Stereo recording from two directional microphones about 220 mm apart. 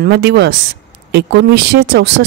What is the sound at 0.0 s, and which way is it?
Speech, 50° right (ahead or behind).